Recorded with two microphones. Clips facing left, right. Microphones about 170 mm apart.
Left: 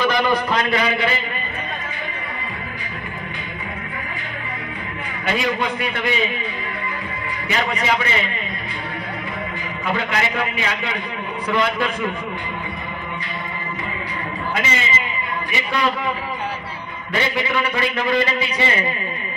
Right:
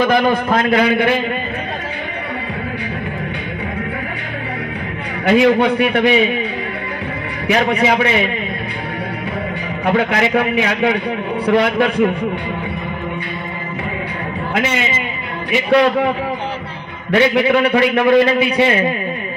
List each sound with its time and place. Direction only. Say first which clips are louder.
0.0 s a man's voice: right 5 dB; 50° right (ahead or behind)
5.4 s a man's voice: right 11 dB; 65° right (ahead or behind)
7.4 s a man's voice: right 7 dB; 65° right (ahead or behind)
9.8 s a man's voice: right 7 dB; 65° right (ahead or behind)
14.5 s a man's voice: right 5 dB; 65° right (ahead or behind)
17.1 s a man's voice: right 9 dB; 70° right (ahead or behind)